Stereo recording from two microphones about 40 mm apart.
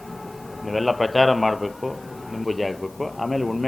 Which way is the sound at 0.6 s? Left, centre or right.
Centre.